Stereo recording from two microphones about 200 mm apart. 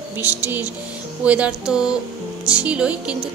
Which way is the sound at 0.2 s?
10° right (ahead or behind).